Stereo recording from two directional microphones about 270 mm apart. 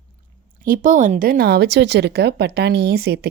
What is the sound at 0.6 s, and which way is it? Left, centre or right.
A woman's voice, right.